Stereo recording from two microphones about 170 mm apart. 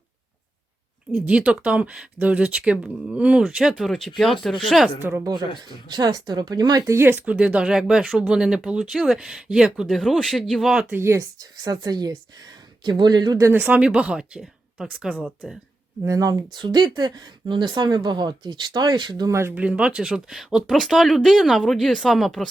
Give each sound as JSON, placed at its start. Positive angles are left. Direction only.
{"t": 1.1, "sound": "speech", "side_deg": -5}
{"t": 4.9, "sound": "speech", "side_deg": -15}
{"t": 5.3, "sound": "speech", "side_deg": -25}
{"t": 10.8, "sound": "speech", "side_deg": -15}
{"t": 16.0, "sound": "speech", "side_deg": -20}